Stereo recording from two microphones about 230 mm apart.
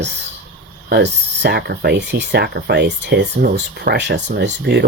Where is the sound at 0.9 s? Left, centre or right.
Right.